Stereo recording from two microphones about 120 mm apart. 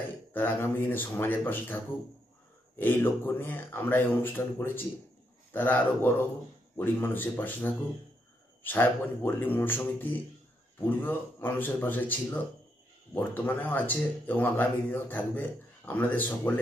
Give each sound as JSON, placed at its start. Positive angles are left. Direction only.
{"t": 0.3, "sound": "speech", "side_deg": 15}
{"t": 2.8, "sound": "speech", "side_deg": 20}